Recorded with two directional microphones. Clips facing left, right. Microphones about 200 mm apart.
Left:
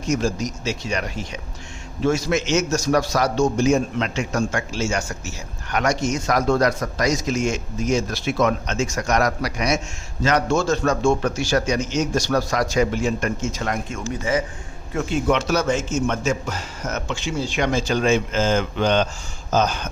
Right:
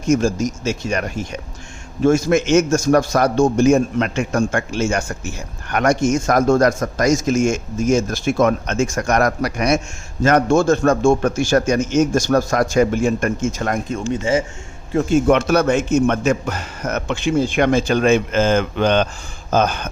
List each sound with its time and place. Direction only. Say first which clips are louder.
0.1 s a man's voice: right 6 dB; 50° right (ahead or behind)
14.1 s a man's voice: right 4 dB; 25° right (ahead or behind)
14.9 s a man's voice: right 6 dB; 50° right (ahead or behind)